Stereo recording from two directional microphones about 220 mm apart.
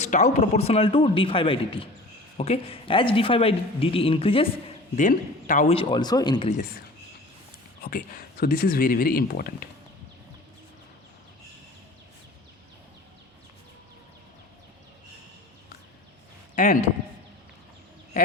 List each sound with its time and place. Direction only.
0.0 s speech: 35° left (ahead or behind)
6.5 s speech: 40° left (ahead or behind)
16.6 s speech: 35° left (ahead or behind)